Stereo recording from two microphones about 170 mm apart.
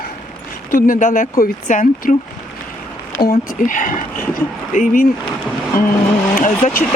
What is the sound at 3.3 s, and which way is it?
Speech, 50° left (ahead or behind).